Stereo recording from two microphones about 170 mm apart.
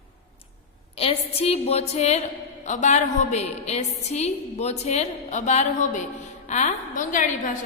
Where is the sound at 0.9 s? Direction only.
35° left (ahead or behind).